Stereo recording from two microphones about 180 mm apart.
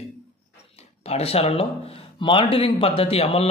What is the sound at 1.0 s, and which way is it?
Speech, 35° left (ahead or behind).